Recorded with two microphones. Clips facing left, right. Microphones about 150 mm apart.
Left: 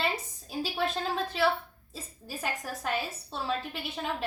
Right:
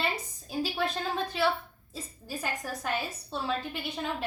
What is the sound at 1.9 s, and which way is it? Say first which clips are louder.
A woman's voice: right 2 dB; centre (ahead or behind).